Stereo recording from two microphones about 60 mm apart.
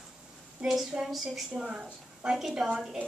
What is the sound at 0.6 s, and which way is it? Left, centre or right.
Speech, centre.